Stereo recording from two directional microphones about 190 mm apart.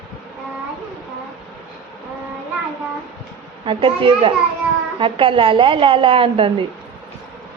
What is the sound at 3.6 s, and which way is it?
A woman's voice, 25° right (ahead or behind).